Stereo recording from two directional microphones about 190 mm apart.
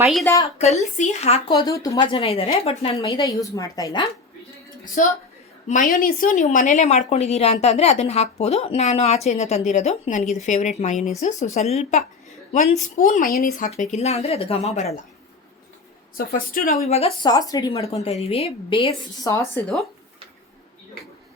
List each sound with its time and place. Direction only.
0.0 s a woman's voice: centre (ahead or behind)
0.6 s speech: 35° left (ahead or behind)
1.5 s a woman's voice: 20° left (ahead or behind)
5.6 s speech: 45° left (ahead or behind)
16.1 s speech: 50° left (ahead or behind)
16.8 s speech: 35° left (ahead or behind)
17.2 s a woman's voice: 20° left (ahead or behind)